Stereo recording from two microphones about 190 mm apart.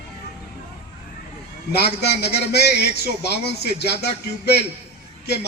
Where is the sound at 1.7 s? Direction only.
60° left (ahead or behind).